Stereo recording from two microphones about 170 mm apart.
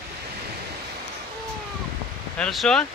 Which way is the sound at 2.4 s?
Centre (ahead or behind).